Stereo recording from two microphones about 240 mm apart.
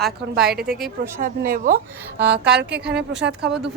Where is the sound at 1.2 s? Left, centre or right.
Right.